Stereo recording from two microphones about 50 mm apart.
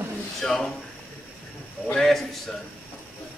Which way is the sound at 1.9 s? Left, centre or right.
Centre.